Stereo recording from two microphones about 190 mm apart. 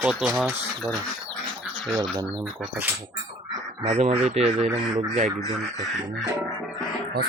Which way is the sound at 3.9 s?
35° right (ahead or behind).